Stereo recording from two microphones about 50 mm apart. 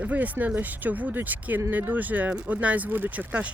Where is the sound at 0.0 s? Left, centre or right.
Right.